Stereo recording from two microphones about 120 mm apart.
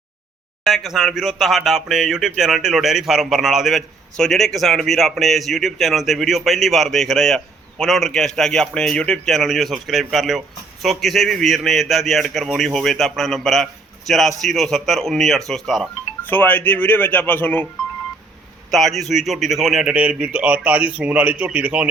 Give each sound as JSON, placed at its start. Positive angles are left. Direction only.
{"t": 0.6, "sound": "speech", "side_deg": 0}
{"t": 16.2, "sound": "speech", "side_deg": 15}
{"t": 18.7, "sound": "a man's voice", "side_deg": 0}